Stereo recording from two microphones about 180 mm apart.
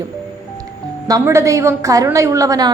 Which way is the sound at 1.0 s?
15° right (ahead or behind).